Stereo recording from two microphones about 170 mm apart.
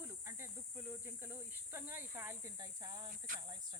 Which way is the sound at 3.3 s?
50° right (ahead or behind).